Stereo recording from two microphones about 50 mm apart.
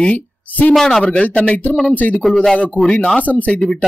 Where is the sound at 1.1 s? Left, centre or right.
Left.